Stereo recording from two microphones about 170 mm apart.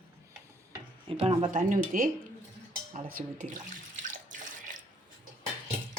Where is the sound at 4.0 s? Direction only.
50° right (ahead or behind).